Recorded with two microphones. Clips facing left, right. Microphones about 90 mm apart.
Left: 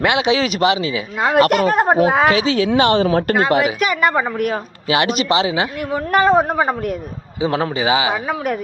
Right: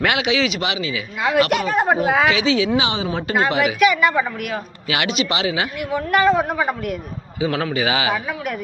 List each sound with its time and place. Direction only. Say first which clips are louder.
0.0 s a man's voice: left 3 dB; 25° left (ahead or behind)
0.3 s speech: left 5 dB; 40° left (ahead or behind)
2.7 s a woman's voice: left 7 dB; 55° left (ahead or behind)
3.6 s speech: right 1 dB; 35° left (ahead or behind)
7.3 s a man's voice: left 2 dB; 25° left (ahead or behind)